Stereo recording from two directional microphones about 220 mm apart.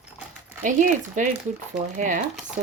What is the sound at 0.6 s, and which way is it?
Speech, 35° right (ahead or behind).